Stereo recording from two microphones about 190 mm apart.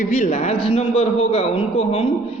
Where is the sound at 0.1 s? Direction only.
40° left (ahead or behind).